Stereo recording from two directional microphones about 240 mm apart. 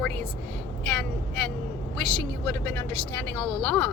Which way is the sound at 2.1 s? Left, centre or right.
Centre.